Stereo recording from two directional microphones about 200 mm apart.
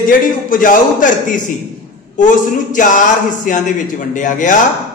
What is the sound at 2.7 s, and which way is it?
A man's voice, 40° left (ahead or behind).